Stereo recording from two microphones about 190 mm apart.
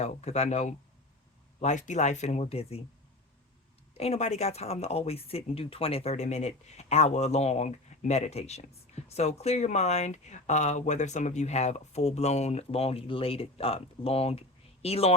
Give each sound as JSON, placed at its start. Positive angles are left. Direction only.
{"t": 0.0, "sound": "speech", "side_deg": 35}
{"t": 3.9, "sound": "speech", "side_deg": 35}